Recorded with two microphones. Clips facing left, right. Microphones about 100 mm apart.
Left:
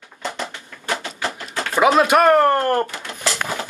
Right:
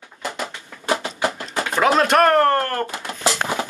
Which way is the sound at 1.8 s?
5° left (ahead or behind).